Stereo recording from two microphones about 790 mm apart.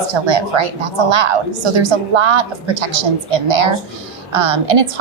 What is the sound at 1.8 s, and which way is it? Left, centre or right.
A woman's voice, right.